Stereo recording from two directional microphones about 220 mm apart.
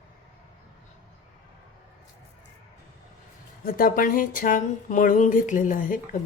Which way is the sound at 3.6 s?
40° left (ahead or behind).